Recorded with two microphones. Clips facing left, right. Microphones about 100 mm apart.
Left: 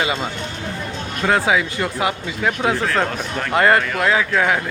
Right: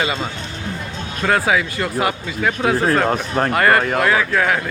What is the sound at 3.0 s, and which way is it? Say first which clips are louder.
Speech: right 5 dB; 40° right (ahead or behind).